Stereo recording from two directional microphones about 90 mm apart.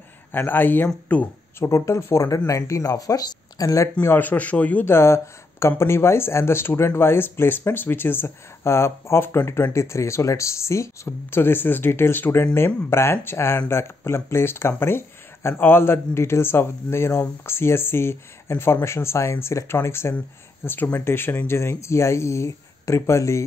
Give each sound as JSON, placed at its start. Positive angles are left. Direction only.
{"t": 0.3, "sound": "speech", "side_deg": 20}
{"t": 1.6, "sound": "speech", "side_deg": 30}
{"t": 4.0, "sound": "speech", "side_deg": 20}
{"t": 4.9, "sound": "speech", "side_deg": 30}